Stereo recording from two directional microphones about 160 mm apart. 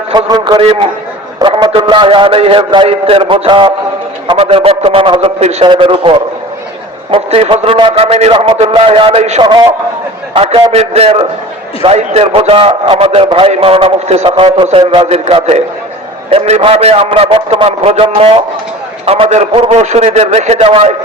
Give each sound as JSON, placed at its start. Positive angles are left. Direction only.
{"t": 0.1, "sound": "a man's voice", "side_deg": -25}
{"t": 9.4, "sound": "a man's voice", "side_deg": -30}